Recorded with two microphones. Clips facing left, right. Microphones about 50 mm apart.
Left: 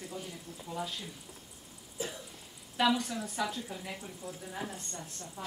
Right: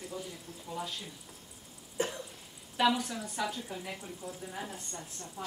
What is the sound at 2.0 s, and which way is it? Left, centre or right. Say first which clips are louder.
Cough: right 5 dB; right.